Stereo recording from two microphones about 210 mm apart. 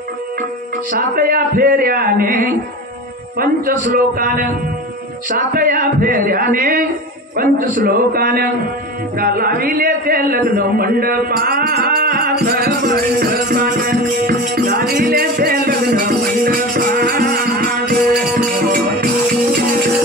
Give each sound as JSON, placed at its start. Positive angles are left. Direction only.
{"t": 0.9, "sound": "a man's voice", "side_deg": -45}
{"t": 5.5, "sound": "a man's voice", "side_deg": -40}
{"t": 16.4, "sound": "music", "side_deg": -45}